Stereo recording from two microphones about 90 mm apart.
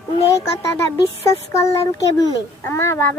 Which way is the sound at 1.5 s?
35° left (ahead or behind).